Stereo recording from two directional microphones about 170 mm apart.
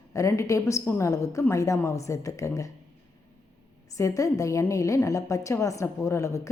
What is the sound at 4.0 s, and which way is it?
A woman's voice, 20° left (ahead or behind).